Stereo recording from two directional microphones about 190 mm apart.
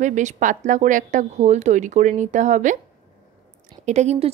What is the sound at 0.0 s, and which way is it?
A woman's voice, 40° right (ahead or behind).